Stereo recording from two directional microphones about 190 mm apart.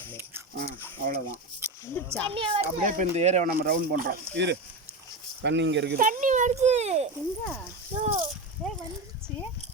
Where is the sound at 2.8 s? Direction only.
40° right (ahead or behind).